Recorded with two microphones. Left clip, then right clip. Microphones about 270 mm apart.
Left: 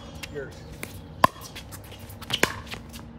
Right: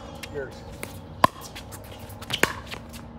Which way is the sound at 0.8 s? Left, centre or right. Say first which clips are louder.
Even; centre.